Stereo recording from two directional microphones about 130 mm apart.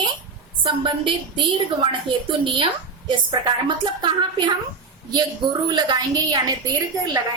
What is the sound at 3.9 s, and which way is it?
A woman's voice, 35° right (ahead or behind).